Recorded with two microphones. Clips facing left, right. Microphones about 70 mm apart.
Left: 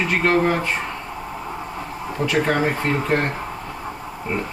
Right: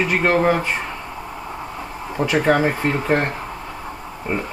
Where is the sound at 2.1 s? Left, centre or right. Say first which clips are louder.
Right 3 dB; centre.